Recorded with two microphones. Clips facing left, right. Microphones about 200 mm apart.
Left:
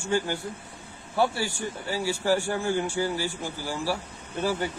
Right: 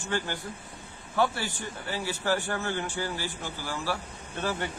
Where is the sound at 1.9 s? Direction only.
10° left (ahead or behind).